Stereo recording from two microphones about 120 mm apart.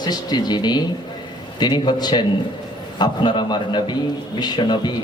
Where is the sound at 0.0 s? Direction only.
35° left (ahead or behind).